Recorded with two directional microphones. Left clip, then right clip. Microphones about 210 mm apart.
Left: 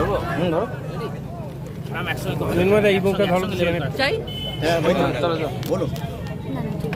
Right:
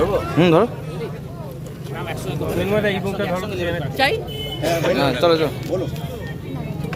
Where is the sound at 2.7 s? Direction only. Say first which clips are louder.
Left 4 dB; 10° left (ahead or behind).